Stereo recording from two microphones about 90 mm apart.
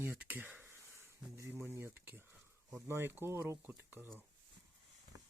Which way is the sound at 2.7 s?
30° right (ahead or behind).